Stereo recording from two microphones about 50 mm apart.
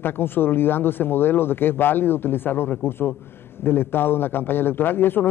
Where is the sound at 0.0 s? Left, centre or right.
Left.